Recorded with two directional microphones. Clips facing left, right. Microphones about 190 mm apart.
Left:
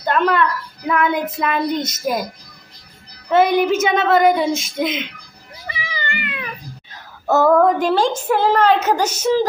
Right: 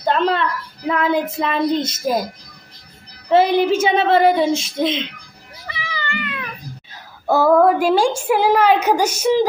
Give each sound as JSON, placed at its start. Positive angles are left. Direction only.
{"t": 0.0, "sound": "a sound", "side_deg": -25}
{"t": 0.9, "sound": "speech", "side_deg": -30}
{"t": 3.2, "sound": "speech", "side_deg": -30}
{"t": 5.7, "sound": "cat", "side_deg": 15}
{"t": 6.9, "sound": "a woman's voice", "side_deg": -10}